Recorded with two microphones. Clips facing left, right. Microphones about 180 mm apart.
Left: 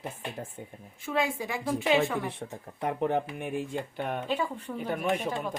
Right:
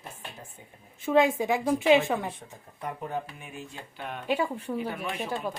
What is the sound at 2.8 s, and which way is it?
Speech, 65° left (ahead or behind).